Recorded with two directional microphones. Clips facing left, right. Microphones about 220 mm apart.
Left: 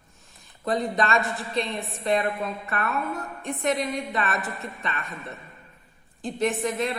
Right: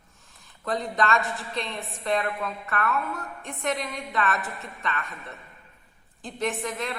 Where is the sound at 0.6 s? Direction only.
15° left (ahead or behind).